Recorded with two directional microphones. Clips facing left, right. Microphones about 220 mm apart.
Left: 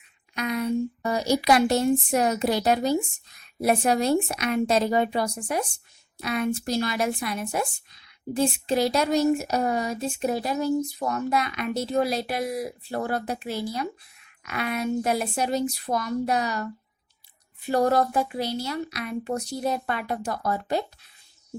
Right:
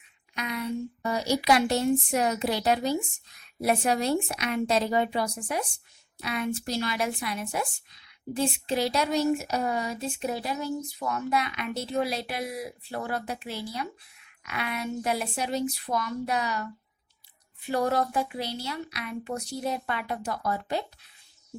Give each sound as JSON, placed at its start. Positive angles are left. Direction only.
{"t": 0.3, "sound": "speech", "side_deg": 45}